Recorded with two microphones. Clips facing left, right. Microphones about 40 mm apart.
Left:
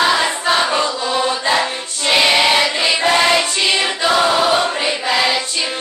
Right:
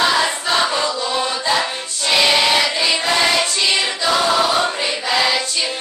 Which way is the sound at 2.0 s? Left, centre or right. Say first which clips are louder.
Left 2 dB; centre.